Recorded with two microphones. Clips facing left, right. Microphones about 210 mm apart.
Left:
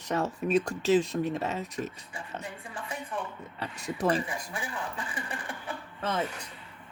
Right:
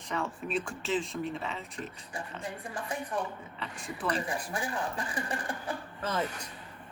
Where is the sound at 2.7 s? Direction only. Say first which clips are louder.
Right 2 dB; 40° right (ahead or behind).